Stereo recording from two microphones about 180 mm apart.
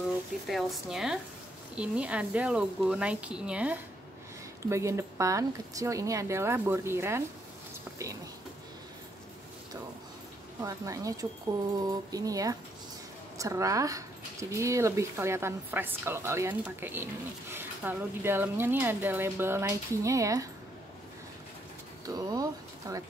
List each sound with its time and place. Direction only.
0.5 s a woman's voice: centre (ahead or behind)
10.6 s a sound: 20° right (ahead or behind)
13.4 s a woman's voice: 15° right (ahead or behind)
22.0 s speech: 20° right (ahead or behind)